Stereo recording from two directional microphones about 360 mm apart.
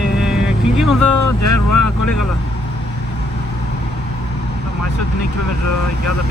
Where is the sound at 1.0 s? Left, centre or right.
Left.